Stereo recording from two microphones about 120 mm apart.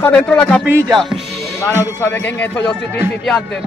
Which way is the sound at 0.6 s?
20° right (ahead or behind).